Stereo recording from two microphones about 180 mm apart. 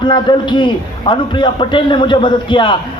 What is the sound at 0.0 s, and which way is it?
A man's voice, 25° left (ahead or behind).